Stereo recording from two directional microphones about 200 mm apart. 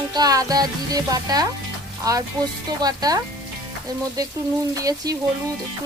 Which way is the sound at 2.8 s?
20° right (ahead or behind).